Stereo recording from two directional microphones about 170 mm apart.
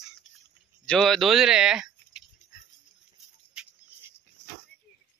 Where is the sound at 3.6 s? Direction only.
5° right (ahead or behind).